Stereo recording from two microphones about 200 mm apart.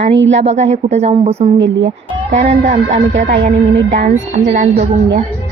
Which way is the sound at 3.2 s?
40° right (ahead or behind).